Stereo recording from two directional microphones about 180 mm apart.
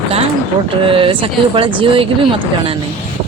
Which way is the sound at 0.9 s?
30° right (ahead or behind).